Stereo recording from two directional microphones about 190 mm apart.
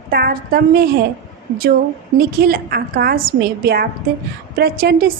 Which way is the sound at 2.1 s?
50° right (ahead or behind).